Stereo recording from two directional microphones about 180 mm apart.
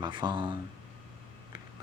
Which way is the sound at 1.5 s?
25° right (ahead or behind).